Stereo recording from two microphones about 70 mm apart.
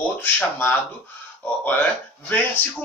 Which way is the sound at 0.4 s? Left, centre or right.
Left.